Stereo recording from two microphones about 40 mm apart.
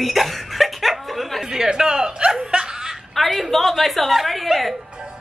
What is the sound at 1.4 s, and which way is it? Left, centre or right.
Chuckle, centre.